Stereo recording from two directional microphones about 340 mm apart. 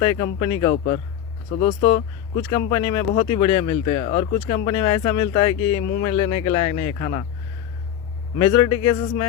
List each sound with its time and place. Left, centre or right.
0.0 s speech: centre
8.4 s speech: centre